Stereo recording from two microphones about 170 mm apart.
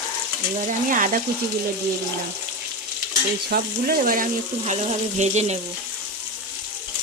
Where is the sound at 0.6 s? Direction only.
50° right (ahead or behind).